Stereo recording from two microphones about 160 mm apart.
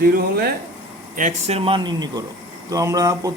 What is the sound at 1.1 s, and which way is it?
Speech, 50° right (ahead or behind).